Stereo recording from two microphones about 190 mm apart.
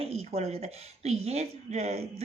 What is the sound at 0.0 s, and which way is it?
Speech, 35° right (ahead or behind).